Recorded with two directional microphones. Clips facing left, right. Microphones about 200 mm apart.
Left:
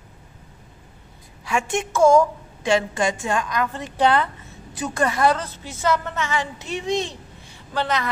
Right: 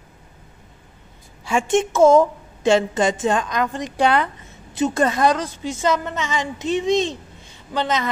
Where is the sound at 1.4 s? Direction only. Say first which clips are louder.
Right 5 dB; 25° right (ahead or behind).